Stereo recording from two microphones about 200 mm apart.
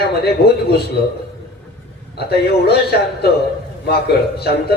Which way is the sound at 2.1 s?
55° left (ahead or behind).